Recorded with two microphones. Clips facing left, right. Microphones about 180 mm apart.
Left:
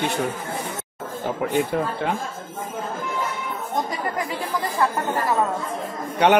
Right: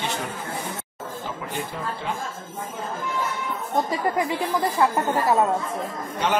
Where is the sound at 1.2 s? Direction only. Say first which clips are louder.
Left 10 dB; 60° left (ahead or behind).